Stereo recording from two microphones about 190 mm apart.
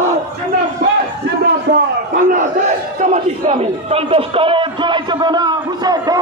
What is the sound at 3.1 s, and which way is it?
A man's voice, 35° right (ahead or behind).